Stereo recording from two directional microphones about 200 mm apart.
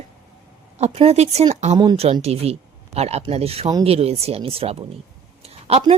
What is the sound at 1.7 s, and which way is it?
Speech, 20° right (ahead or behind).